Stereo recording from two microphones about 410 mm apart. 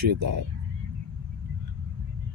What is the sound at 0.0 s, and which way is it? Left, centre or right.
Speech, right.